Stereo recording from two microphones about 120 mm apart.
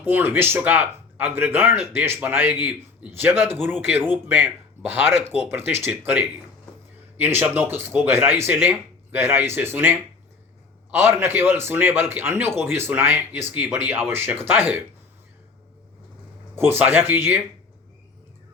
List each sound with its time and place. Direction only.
0.0 s a man's voice: 15° right (ahead or behind)
16.6 s a man's voice: 15° right (ahead or behind)